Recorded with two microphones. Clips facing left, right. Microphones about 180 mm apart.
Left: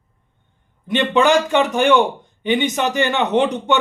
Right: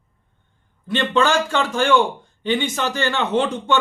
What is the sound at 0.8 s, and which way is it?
A man's voice, 20° left (ahead or behind).